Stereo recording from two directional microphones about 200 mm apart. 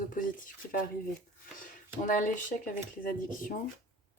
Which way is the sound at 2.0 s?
40° left (ahead or behind).